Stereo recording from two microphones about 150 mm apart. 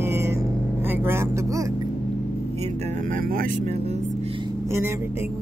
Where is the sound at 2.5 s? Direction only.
45° right (ahead or behind).